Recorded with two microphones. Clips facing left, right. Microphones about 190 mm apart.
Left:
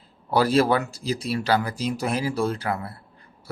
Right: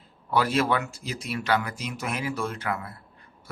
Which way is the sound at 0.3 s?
35° left (ahead or behind).